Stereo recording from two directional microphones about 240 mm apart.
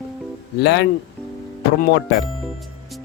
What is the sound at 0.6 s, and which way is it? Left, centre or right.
Speech, left.